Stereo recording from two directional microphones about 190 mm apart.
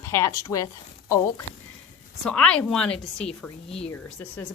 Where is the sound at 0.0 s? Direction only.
15° left (ahead or behind).